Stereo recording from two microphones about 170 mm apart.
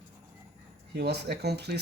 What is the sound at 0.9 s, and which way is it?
Speech, 70° right (ahead or behind).